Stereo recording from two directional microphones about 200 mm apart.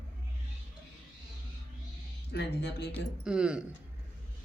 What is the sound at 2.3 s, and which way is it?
Speech, 55° left (ahead or behind).